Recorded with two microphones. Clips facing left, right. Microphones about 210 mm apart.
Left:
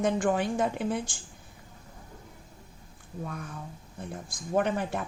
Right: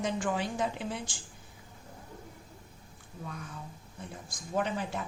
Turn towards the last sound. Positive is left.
turn(degrees=55)  # may be behind; listen again after turning